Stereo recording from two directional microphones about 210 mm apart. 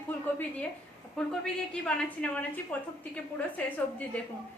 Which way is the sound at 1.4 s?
5° left (ahead or behind).